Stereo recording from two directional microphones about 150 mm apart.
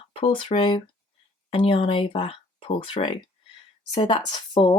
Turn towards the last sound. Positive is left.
turn(degrees=35)  # may be behind; listen again after turning